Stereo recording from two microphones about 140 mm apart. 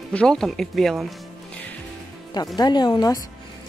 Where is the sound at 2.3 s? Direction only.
30° left (ahead or behind).